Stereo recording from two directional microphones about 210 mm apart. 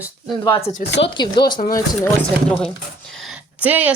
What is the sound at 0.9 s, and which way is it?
Speech, 55° left (ahead or behind).